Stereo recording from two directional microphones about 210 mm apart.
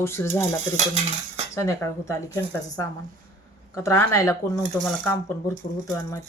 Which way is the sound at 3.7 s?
15° left (ahead or behind).